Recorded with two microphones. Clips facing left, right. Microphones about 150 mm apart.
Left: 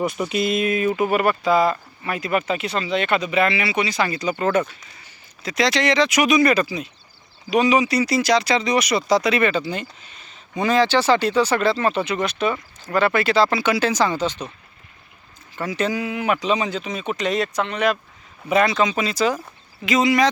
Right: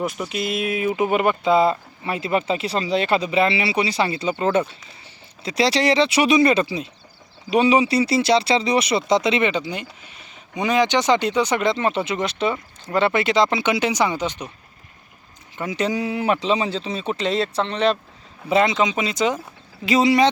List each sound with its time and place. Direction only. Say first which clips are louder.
0.0 s speech: left 3 dB; centre (ahead or behind)
0.9 s speech: even; 20° right (ahead or behind)
15.5 s speech: even; 20° right (ahead or behind)
19.8 s speech: right 1 dB; 30° right (ahead or behind)